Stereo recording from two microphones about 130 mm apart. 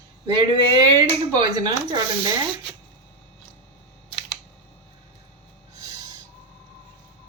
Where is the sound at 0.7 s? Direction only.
35° right (ahead or behind).